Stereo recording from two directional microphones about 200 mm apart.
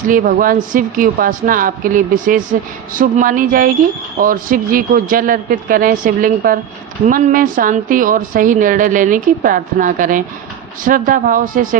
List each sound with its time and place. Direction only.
0.1 s a woman's voice: 45° right (ahead or behind)